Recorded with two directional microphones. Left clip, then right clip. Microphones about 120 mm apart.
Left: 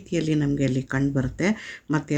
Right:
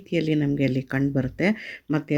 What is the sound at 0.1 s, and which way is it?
Speech, 20° right (ahead or behind).